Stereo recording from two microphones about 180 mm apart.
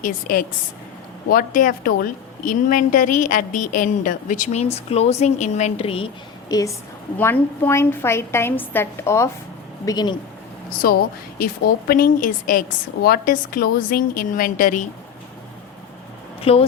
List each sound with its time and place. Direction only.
0.0 s a woman's voice: 50° left (ahead or behind); by 6.1 s 30° left (ahead or behind)
6.5 s a woman's voice: 20° left (ahead or behind)
11.3 s a woman's voice: 55° left (ahead or behind)
16.4 s speech: 35° left (ahead or behind)